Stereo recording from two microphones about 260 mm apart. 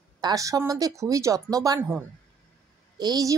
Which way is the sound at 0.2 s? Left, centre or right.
Centre.